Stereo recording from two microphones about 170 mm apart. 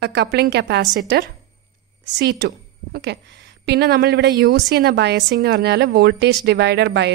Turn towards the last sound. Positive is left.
turn(degrees=-80)